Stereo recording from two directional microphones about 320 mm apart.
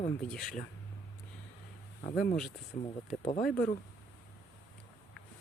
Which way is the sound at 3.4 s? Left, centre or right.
Centre.